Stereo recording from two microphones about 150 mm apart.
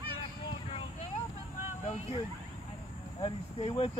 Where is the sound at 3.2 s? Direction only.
35° left (ahead or behind).